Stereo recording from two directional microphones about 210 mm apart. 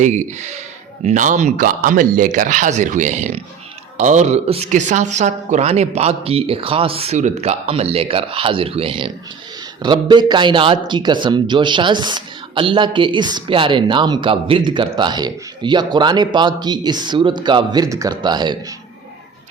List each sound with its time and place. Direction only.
0.0 s a man's voice: 35° right (ahead or behind)